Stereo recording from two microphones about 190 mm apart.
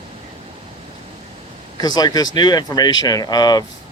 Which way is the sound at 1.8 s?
20° left (ahead or behind).